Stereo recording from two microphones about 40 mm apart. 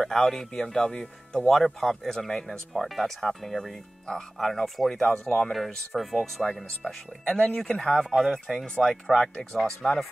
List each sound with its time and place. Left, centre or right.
0.0 s speech: centre
5.5 s speech: centre
7.5 s speech: centre
7.9 s speech: centre